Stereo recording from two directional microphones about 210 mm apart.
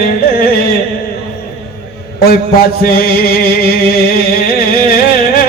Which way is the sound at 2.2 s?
45° left (ahead or behind).